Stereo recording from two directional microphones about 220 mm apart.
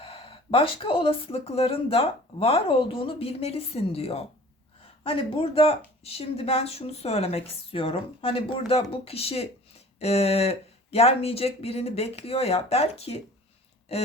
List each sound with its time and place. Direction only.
0.0 s speech: 25° left (ahead or behind)